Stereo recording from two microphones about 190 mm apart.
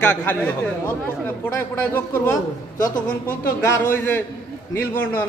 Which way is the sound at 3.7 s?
10° left (ahead or behind).